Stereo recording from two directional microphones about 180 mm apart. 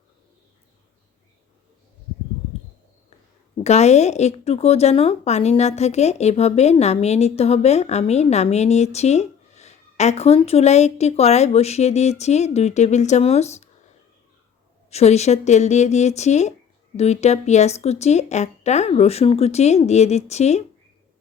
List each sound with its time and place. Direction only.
3.6 s speech: 40° left (ahead or behind)
14.8 s speech: 35° left (ahead or behind)